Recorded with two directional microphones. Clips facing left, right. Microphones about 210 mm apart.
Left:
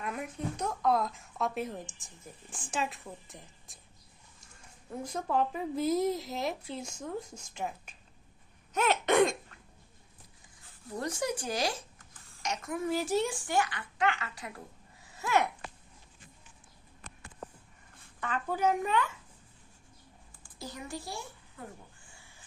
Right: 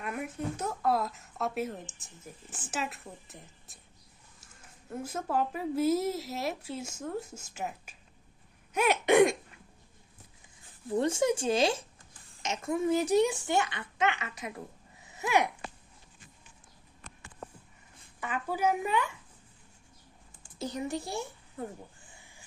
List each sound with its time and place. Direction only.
0.0 s speech: 10° right (ahead or behind)
4.9 s a child's voice: 5° right (ahead or behind)
10.8 s speech: 25° right (ahead or behind)
15.0 s a sound: 20° right (ahead or behind)
18.2 s a child's voice: 10° right (ahead or behind)
20.6 s speech: 20° right (ahead or behind)